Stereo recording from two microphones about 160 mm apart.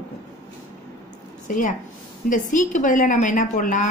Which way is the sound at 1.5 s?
55° left (ahead or behind).